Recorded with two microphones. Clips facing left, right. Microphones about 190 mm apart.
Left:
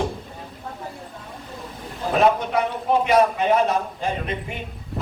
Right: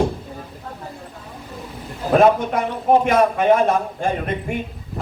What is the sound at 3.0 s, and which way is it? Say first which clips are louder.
A man's voice: right 1 dB; 50° right (ahead or behind).